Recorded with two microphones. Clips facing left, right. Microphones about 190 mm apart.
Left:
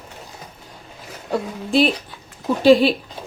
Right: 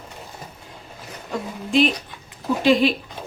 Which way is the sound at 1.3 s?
35° left (ahead or behind).